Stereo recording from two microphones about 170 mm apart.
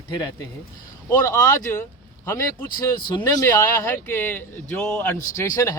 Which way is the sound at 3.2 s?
20° left (ahead or behind).